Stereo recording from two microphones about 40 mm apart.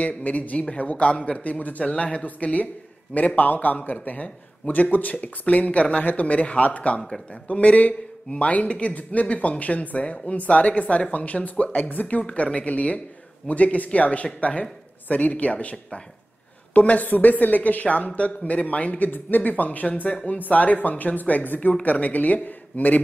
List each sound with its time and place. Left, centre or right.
0.2 s a man's voice: left
1.1 s a man's voice: left
1.4 s a man's voice: left
2.2 s a man's voice: left
16.7 s a man's voice: left
19.0 s a man's voice: left